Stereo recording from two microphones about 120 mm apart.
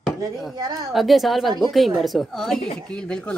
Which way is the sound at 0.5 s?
35° right (ahead or behind).